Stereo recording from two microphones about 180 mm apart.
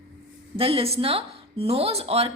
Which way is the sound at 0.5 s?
30° right (ahead or behind).